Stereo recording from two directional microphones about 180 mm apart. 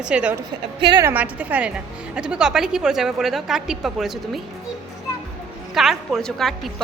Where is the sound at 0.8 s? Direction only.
25° right (ahead or behind).